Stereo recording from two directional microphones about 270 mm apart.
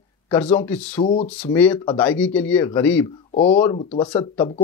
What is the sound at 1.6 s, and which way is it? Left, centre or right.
Speech, centre.